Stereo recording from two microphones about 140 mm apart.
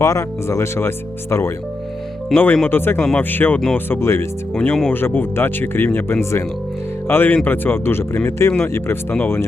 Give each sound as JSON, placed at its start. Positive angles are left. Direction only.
{"t": 0.0, "sound": "speech", "side_deg": 20}